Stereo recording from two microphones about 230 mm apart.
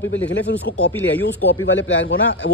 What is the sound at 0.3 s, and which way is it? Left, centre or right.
A man's voice, left.